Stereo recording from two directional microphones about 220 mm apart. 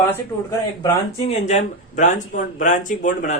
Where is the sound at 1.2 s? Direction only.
30° left (ahead or behind).